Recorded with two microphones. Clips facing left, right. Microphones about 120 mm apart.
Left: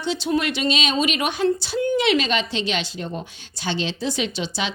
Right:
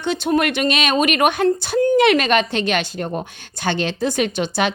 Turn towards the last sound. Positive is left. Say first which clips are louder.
# right 6 dB
turn(degrees=-55)  # may be behind; listen again after turning